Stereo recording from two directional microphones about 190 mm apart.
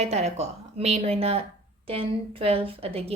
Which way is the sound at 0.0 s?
35° right (ahead or behind).